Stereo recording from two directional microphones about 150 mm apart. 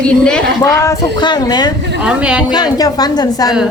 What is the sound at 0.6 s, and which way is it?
A woman's voice, 20° left (ahead or behind).